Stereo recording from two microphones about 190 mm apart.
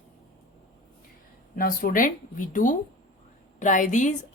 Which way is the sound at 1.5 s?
50° left (ahead or behind).